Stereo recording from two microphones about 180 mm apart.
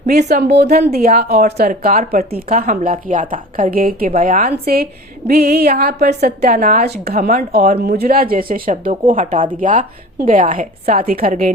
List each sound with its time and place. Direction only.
0.1 s a woman's voice: 60° right (ahead or behind)